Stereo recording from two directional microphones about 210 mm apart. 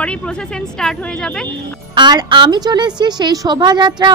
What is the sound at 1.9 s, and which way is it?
A woman's voice, 20° right (ahead or behind).